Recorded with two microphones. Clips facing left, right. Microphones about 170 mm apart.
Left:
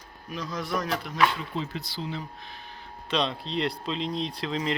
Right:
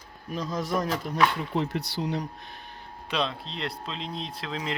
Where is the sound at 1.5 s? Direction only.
65° right (ahead or behind).